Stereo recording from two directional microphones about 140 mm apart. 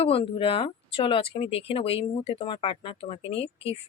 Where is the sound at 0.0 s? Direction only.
40° left (ahead or behind).